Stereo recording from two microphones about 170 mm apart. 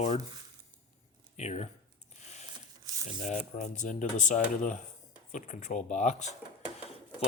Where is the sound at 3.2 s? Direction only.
45° left (ahead or behind).